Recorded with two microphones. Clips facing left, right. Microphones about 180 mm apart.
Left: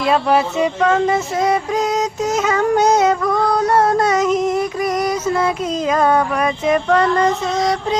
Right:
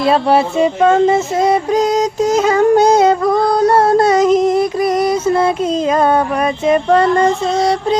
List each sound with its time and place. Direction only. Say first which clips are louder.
0.0 s music: right 3 dB; 30° right (ahead or behind)